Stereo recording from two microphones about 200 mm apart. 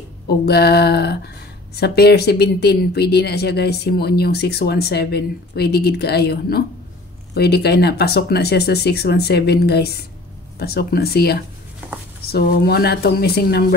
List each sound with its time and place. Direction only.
0.5 s speech: 55° left (ahead or behind)